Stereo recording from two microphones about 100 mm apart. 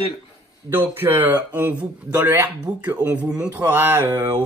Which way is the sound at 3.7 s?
20° right (ahead or behind).